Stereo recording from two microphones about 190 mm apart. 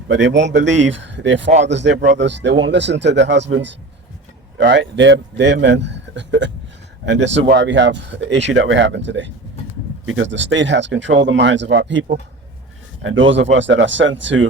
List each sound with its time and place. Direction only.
0.1 s a man's voice: 70° right (ahead or behind)
13.0 s speech: 90° right
13.6 s a man's voice: 75° right (ahead or behind)